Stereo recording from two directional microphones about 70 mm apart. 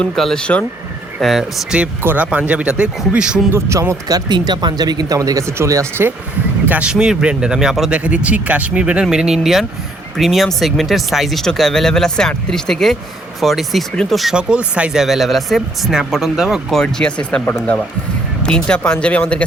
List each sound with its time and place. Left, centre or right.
0.2 s speech: centre
1.7 s speech: centre
3.5 s speech: right
4.1 s speech: right
5.5 s speech: right
6.7 s speech: centre
14.3 s speech: centre
15.0 s speech: centre
16.6 s speech: centre
18.4 s speech: centre